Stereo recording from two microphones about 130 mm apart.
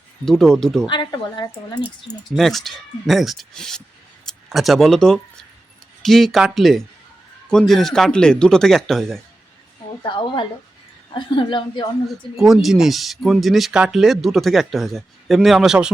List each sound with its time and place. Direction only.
0.3 s speech: 5° left (ahead or behind)
0.9 s speech: 35° left (ahead or behind)
2.3 s speech: centre (ahead or behind)
10.0 s speech: 40° left (ahead or behind)
12.4 s speech: 5° right (ahead or behind)